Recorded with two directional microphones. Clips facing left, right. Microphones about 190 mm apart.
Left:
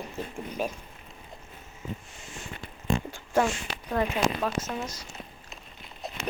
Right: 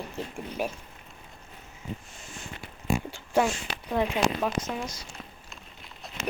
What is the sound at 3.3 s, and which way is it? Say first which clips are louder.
Speech: even; 10° right (ahead or behind).